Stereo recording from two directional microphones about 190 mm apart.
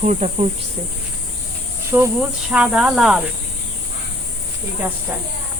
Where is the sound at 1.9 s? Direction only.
15° right (ahead or behind).